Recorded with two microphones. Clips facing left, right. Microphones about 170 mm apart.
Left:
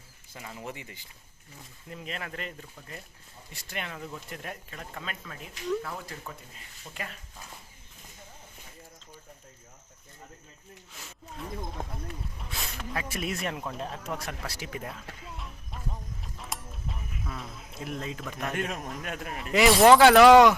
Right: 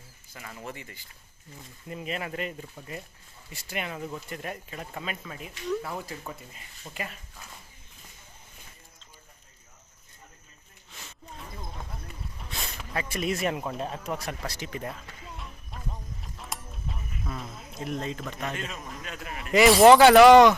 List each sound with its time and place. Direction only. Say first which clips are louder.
0.3 s speech: even; 15° left (ahead or behind)
1.9 s speech: right 5 dB; 5° right (ahead or behind)
10.9 s a sound: left 1 dB; centre (ahead or behind)
12.0 s speech: left 3 dB; 5° left (ahead or behind)
15.2 s music: even; centre (ahead or behind)
18.5 s a man's voice: left 4 dB; 60° left (ahead or behind)
19.4 s speech: right 3 dB; centre (ahead or behind)